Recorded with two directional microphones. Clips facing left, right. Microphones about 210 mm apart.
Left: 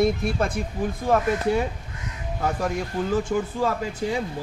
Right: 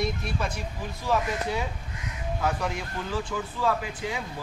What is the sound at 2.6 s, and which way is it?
Speech, 45° left (ahead or behind).